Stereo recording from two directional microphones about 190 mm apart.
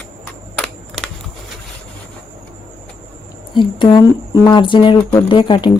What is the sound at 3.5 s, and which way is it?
Speech, 25° left (ahead or behind).